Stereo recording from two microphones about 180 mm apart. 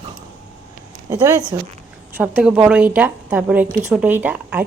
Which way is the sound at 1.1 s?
20° right (ahead or behind).